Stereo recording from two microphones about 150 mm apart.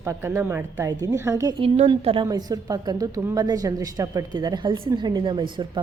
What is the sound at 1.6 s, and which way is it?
A woman's voice, 40° right (ahead or behind).